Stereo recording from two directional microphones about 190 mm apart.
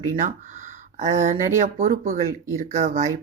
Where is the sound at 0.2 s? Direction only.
40° right (ahead or behind).